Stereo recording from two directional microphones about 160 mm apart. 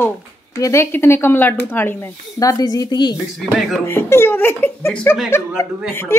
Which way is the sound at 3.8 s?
15° left (ahead or behind).